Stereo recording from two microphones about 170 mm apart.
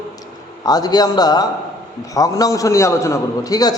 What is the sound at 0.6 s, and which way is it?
A man's voice, 25° left (ahead or behind).